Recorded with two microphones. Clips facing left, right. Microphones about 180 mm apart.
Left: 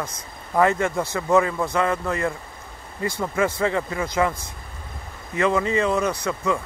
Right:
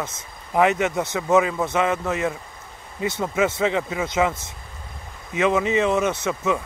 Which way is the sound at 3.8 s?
5° right (ahead or behind).